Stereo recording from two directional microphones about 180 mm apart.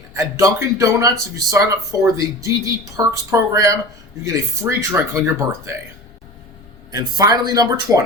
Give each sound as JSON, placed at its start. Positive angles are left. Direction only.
{"t": 0.1, "sound": "speech", "side_deg": -15}
{"t": 6.9, "sound": "speech", "side_deg": -20}